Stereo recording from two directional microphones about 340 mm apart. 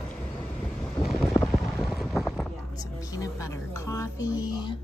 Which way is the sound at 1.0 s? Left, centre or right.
Centre.